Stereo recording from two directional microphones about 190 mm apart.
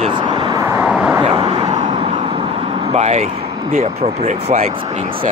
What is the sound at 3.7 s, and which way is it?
Speech, 45° right (ahead or behind).